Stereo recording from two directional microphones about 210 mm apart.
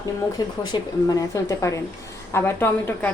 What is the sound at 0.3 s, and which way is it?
A woman's voice, 20° left (ahead or behind).